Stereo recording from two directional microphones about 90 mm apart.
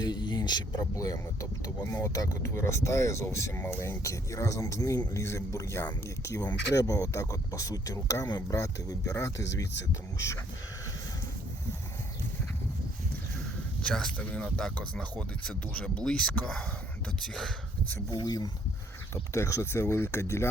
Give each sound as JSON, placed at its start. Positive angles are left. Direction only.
{"t": 0.0, "sound": "speech", "side_deg": 55}
{"t": 13.8, "sound": "speech", "side_deg": 10}
{"t": 18.1, "sound": "speech", "side_deg": 45}
{"t": 19.1, "sound": "speech", "side_deg": 30}